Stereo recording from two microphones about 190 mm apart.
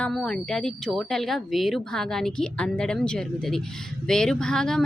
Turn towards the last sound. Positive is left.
turn(degrees=5)  # may be behind; listen again after turning